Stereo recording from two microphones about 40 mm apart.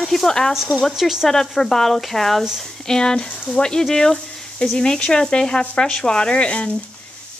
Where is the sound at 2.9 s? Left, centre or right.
Centre.